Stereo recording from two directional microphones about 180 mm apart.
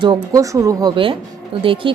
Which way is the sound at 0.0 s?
20° right (ahead or behind).